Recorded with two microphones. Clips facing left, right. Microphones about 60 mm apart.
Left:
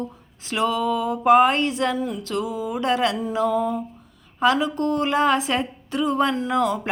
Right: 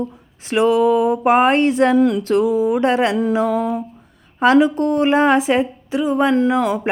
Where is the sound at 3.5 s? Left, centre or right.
Right.